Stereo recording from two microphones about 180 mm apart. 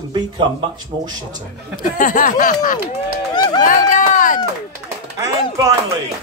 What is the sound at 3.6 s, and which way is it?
Run, 45° left (ahead or behind).